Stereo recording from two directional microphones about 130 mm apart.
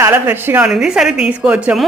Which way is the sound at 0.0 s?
15° right (ahead or behind).